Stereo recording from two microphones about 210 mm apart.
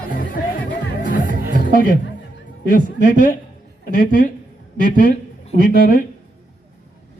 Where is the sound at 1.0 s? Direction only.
40° left (ahead or behind).